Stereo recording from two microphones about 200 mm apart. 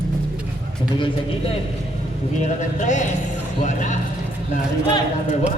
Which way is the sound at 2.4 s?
35° left (ahead or behind).